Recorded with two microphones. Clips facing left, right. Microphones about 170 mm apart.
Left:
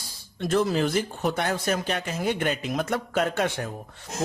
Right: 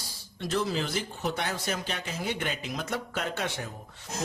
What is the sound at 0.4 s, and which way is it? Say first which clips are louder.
A man's voice: left 6 dB; 50° left (ahead or behind).